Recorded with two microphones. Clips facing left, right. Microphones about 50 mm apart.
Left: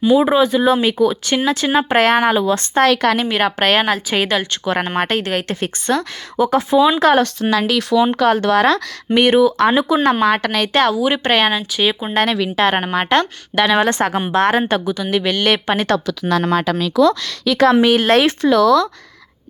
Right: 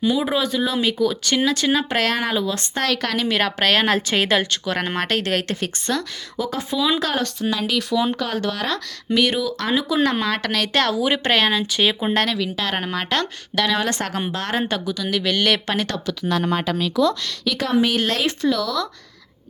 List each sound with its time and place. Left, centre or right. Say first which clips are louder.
0.0 s speech: left 8 dB; left
3.2 s speech: left 3 dB; centre
3.8 s speech: left 1 dB; centre
4.6 s speech: left 5 dB; left
5.2 s speech: left 2 dB; centre
5.5 s speech: left 5 dB; left
7.0 s speech: left 9 dB; left
7.7 s speech: left 5 dB; left
9.1 s speech: left 8 dB; left; by 12.1 s centre
12.3 s speech: left 7 dB; left
15.9 s speech: left 6 dB; left
18.1 s speech: left 8 dB; left